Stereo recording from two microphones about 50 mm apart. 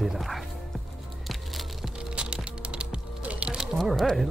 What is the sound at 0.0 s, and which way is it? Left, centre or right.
Music, centre.